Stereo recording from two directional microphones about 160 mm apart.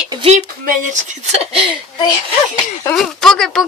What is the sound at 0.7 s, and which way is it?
Speech, 50° right (ahead or behind).